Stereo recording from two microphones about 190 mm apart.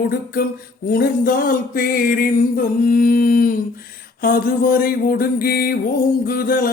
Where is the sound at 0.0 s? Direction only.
55° left (ahead or behind).